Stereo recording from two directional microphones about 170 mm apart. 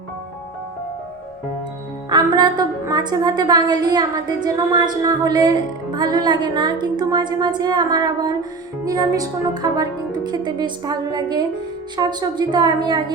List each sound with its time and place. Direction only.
2.0 s a woman's voice: 25° right (ahead or behind)